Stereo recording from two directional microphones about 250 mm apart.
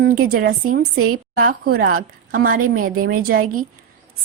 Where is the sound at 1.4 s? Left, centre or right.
Right.